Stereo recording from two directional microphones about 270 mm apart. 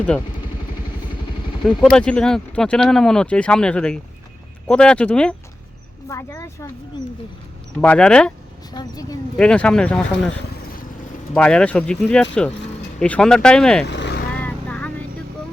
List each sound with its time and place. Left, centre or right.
1.6 s speech: centre
7.8 s speech: centre
8.7 s speech: centre
11.3 s speech: centre
13.8 s vehicle: left
14.4 s vehicle: centre